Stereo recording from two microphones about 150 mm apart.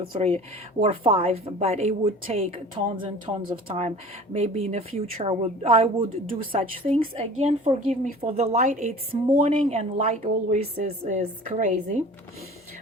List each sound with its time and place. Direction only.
0.0 s a woman's voice: 40° right (ahead or behind)